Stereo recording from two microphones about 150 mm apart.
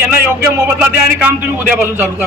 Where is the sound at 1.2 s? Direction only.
10° right (ahead or behind).